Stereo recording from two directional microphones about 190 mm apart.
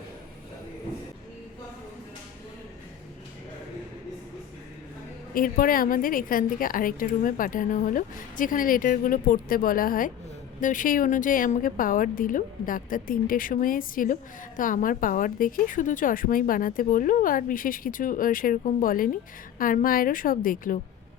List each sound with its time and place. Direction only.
5.3 s a woman's voice: 50° left (ahead or behind)